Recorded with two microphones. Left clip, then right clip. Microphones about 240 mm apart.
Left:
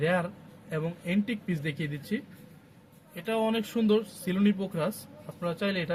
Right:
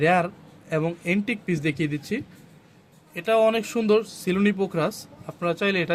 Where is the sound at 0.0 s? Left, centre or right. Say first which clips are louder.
Right 8 dB; right.